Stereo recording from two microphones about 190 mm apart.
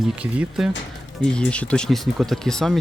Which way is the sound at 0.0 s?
5° right (ahead or behind).